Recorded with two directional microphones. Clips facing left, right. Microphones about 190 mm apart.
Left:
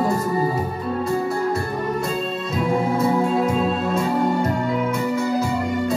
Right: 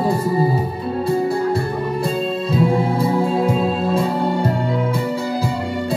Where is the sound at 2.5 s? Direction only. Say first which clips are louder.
Right 2 dB; 30° right (ahead or behind).